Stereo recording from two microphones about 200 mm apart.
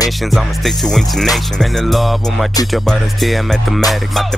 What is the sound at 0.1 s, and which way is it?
Music, centre (ahead or behind).